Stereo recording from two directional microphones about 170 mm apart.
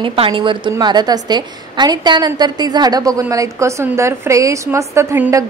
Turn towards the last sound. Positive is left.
turn(degrees=-15)  # may be behind; listen again after turning